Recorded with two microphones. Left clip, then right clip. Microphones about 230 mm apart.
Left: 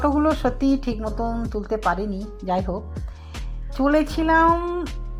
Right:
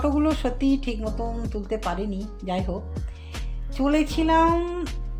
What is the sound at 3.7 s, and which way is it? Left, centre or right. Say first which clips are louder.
Speech: left 3 dB; centre.